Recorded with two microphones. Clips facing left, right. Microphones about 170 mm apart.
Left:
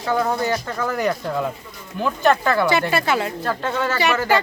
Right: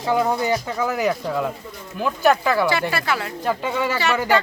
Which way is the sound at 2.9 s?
20° left (ahead or behind).